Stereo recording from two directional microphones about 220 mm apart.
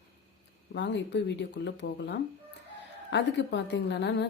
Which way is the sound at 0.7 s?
50° left (ahead or behind).